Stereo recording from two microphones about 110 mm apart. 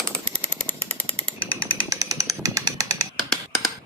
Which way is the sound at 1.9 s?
30° right (ahead or behind).